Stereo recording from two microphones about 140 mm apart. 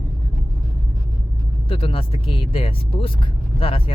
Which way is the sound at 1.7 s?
40° left (ahead or behind).